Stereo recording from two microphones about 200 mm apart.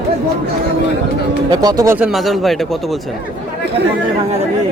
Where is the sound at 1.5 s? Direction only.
20° right (ahead or behind).